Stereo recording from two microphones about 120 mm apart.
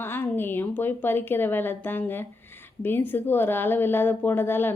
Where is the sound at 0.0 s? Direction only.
20° left (ahead or behind).